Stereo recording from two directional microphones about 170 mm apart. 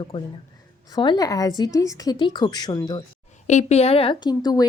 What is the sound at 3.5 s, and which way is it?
A woman's voice, 40° left (ahead or behind).